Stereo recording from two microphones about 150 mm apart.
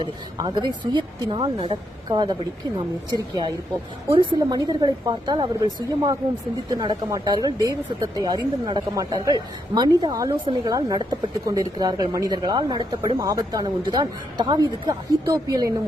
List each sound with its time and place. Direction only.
0.0 s speech: 30° right (ahead or behind)